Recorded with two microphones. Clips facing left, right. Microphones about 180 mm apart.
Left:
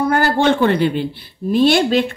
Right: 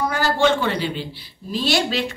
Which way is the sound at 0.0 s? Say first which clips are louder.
Left 4 dB; 55° left (ahead or behind).